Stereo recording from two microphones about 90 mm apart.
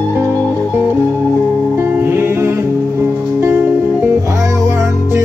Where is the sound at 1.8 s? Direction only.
25° right (ahead or behind).